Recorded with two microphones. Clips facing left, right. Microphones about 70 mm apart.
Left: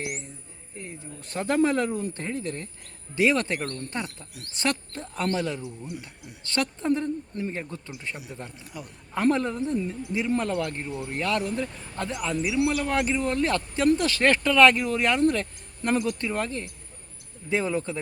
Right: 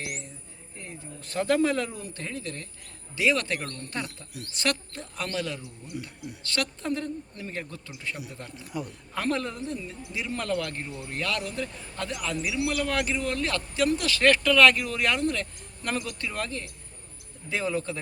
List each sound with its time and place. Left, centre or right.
0.0 s speech: centre
8.7 s speech: centre
9.1 s speech: left
9.7 s speech: left
10.4 s speech: centre